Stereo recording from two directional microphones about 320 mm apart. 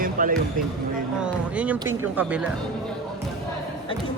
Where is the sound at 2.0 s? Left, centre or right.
Centre.